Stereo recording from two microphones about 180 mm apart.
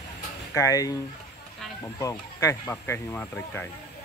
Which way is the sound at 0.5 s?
20° left (ahead or behind).